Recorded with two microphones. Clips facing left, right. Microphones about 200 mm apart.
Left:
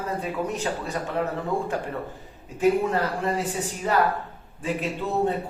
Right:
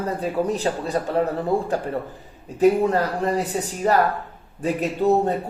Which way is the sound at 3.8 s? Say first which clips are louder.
Right 3 dB; 40° right (ahead or behind).